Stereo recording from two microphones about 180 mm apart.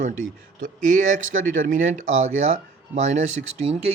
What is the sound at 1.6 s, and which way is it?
Speech, 45° right (ahead or behind).